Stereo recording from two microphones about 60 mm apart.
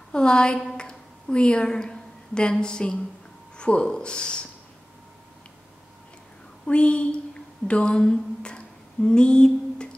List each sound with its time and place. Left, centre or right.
0.1 s a woman's voice: centre
6.6 s a woman's voice: centre
7.6 s a sound: centre